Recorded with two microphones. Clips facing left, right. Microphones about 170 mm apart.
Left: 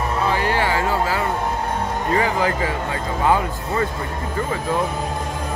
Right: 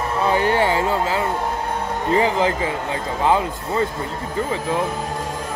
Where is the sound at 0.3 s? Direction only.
25° right (ahead or behind).